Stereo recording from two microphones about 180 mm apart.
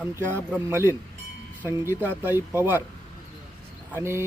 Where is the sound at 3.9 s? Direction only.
15° right (ahead or behind).